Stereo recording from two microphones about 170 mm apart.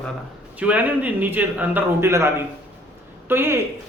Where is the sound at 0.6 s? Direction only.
10° right (ahead or behind).